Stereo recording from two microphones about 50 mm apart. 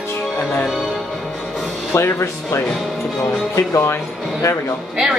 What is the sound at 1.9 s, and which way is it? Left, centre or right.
Speech, left.